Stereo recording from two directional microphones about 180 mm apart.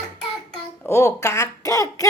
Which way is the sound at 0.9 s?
15° left (ahead or behind).